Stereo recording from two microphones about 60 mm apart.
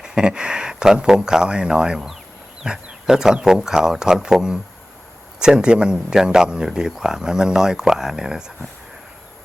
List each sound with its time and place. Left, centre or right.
0.0 s speech: centre